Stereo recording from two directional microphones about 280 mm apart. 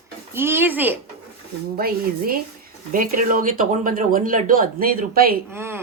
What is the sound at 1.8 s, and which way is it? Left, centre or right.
Speech, right.